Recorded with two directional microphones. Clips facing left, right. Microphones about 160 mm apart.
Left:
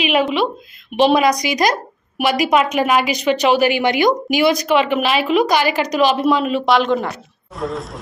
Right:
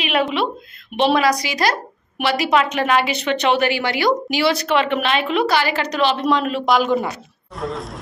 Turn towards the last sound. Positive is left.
turn(degrees=0)  # may be behind; listen again after turning